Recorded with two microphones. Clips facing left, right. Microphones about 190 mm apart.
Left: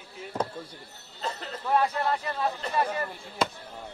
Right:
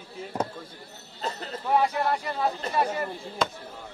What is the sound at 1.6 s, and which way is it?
Speech, 15° right (ahead or behind).